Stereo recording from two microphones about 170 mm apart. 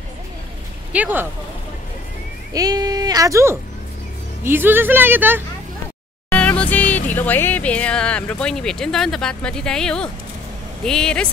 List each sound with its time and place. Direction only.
0.9 s a woman's voice: 10° right (ahead or behind)
2.5 s a woman's voice: 20° right (ahead or behind)
6.3 s speech: 10° left (ahead or behind)